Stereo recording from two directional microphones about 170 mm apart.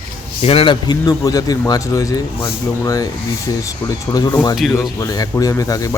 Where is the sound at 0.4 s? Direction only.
30° left (ahead or behind).